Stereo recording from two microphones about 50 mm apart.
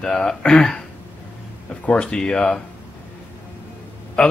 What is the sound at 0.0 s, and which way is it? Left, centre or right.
Speech, centre.